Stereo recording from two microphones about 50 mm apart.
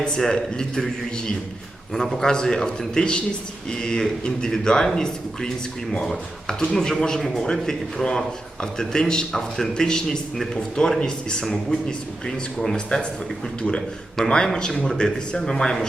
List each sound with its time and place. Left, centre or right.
0.2 s a man's voice: centre